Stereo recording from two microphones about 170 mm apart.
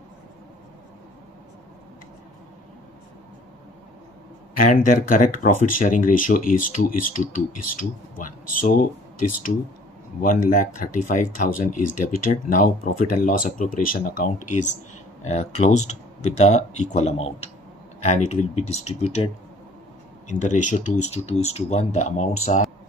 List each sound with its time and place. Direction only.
4.6 s speech: 50° left (ahead or behind)
10.2 s speech: 50° left (ahead or behind)